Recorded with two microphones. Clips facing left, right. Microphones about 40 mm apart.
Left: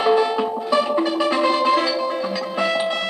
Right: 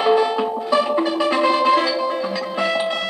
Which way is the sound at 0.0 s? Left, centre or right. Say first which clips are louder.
Right 1 dB; centre.